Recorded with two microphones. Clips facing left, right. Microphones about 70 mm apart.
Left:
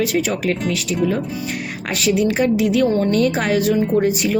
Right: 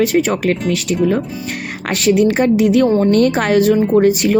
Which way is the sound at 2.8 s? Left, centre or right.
Right.